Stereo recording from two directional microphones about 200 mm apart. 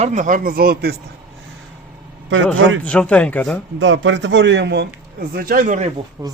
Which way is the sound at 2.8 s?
5° left (ahead or behind).